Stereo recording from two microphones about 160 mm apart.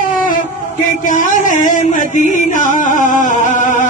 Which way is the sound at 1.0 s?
55° left (ahead or behind).